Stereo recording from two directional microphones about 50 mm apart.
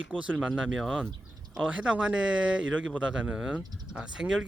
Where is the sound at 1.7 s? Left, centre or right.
Right.